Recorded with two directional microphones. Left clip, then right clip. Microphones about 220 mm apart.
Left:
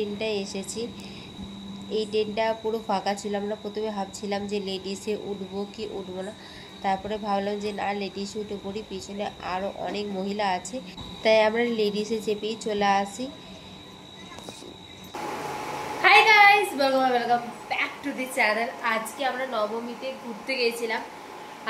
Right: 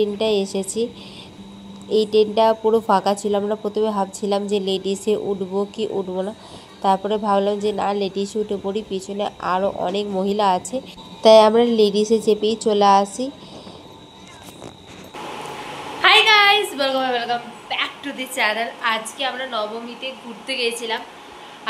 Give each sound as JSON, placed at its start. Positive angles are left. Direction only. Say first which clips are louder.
{"t": 0.0, "sound": "a woman's voice", "louder": "right 9 dB", "side_deg": -35}
{"t": 1.9, "sound": "a woman's voice", "louder": "right 10 dB", "side_deg": -35}
{"t": 16.0, "sound": "a sound", "louder": "right 3 dB", "side_deg": 5}
{"t": 17.6, "sound": "a woman's voice", "louder": "right 7 dB", "side_deg": 0}